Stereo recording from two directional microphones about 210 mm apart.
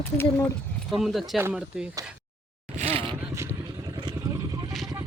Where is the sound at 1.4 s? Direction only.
10° right (ahead or behind).